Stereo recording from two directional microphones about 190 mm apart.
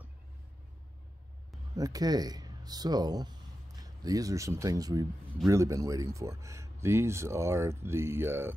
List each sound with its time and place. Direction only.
1.8 s speech: 20° right (ahead or behind)